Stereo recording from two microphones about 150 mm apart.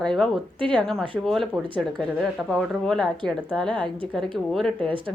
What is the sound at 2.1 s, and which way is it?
A woman's voice, centre (ahead or behind).